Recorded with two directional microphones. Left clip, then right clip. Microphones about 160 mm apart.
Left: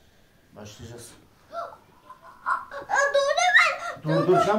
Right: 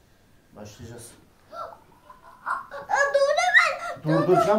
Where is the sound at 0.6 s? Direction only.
40° right (ahead or behind).